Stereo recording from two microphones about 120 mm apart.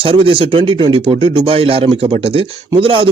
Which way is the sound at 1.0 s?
55° right (ahead or behind).